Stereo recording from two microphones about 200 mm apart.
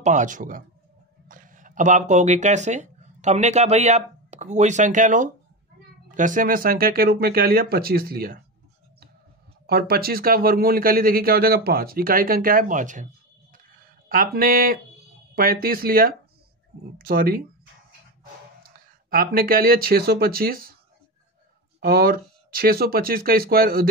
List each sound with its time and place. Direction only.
0.0 s speech: 40° right (ahead or behind)
9.7 s speech: 50° right (ahead or behind)
18.6 s speech: 50° right (ahead or behind)
21.7 s speech: 50° right (ahead or behind)